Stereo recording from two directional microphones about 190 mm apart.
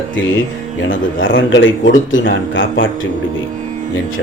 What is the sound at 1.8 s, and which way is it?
Speech, 45° left (ahead or behind).